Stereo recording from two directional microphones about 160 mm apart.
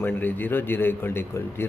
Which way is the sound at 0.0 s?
10° left (ahead or behind).